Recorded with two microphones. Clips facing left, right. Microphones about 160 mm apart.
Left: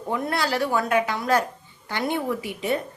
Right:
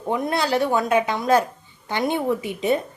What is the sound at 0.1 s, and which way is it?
A woman's voice, 20° right (ahead or behind).